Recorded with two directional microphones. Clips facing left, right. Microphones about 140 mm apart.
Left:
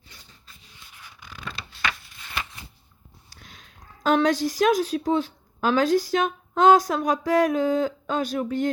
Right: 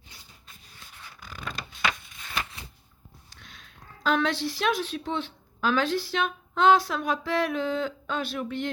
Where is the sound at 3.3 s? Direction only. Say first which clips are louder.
Left 3 dB; 35° left (ahead or behind).